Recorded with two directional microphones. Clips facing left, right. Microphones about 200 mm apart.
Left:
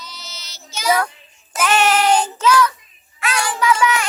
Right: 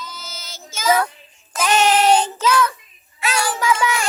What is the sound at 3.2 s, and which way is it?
Child singing, 30° right (ahead or behind).